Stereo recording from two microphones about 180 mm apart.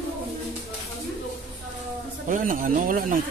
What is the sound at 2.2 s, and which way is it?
Speech, 45° right (ahead or behind).